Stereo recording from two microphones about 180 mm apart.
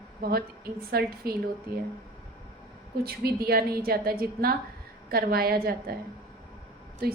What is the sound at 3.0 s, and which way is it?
A woman's voice, 60° right (ahead or behind).